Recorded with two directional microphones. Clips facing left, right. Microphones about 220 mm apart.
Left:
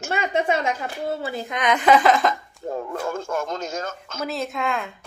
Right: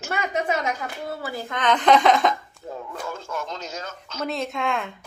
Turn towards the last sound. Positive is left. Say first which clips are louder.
# even
turn(degrees=0)  # may be behind; listen again after turning